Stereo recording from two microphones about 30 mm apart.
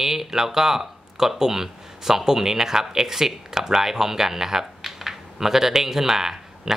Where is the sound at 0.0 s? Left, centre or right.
Centre.